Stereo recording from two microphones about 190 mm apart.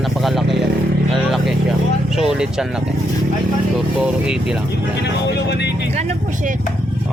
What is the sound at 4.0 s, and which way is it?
Speech, 5° right (ahead or behind).